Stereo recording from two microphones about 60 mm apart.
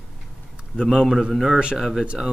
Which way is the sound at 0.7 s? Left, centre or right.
Centre.